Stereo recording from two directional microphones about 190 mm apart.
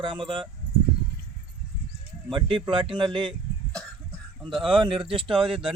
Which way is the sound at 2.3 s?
25° right (ahead or behind).